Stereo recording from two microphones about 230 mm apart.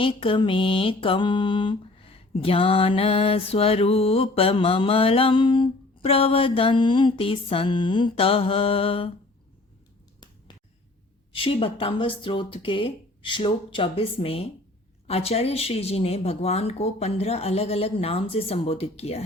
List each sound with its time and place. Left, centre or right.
0.0 s mantra: left
11.3 s mantra: left